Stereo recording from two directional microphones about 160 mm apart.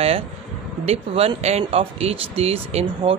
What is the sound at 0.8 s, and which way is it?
Speech, 40° right (ahead or behind).